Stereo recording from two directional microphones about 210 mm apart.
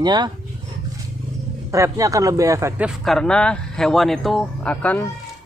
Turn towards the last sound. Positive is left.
turn(degrees=5)  # may be behind; listen again after turning